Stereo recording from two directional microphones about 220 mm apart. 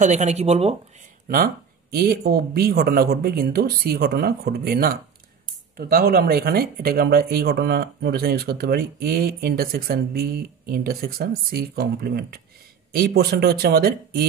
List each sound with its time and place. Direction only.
0.0 s speech: 30° right (ahead or behind)
1.3 s speech: 40° right (ahead or behind)